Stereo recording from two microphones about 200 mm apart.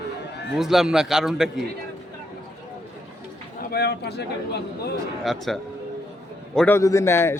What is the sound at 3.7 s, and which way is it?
A man's voice, 55° left (ahead or behind).